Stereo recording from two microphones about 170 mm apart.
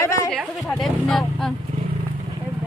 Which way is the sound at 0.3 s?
5° left (ahead or behind).